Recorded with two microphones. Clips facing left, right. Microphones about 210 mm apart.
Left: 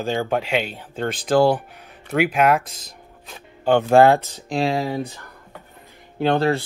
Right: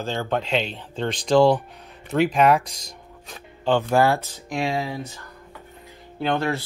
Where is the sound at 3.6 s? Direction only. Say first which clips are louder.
Left 5 dB; 60° left (ahead or behind).